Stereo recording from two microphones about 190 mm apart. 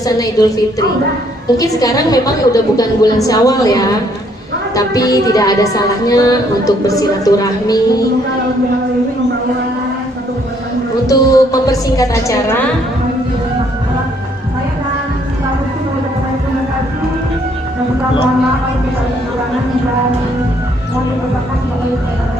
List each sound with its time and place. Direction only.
0.0 s music: 20° left (ahead or behind)
11.0 s a woman's voice: 20° left (ahead or behind)